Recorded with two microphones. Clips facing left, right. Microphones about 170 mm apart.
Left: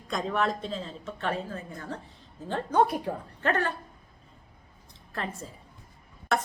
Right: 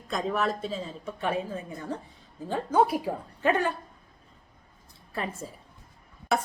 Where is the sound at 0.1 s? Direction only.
Centre (ahead or behind).